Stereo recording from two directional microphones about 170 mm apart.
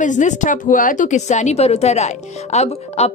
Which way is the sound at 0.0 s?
45° left (ahead or behind).